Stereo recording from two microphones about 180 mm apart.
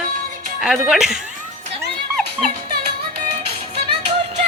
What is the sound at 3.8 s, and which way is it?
Music, 35° right (ahead or behind).